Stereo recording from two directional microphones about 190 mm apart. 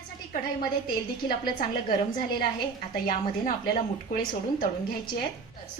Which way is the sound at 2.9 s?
50° left (ahead or behind).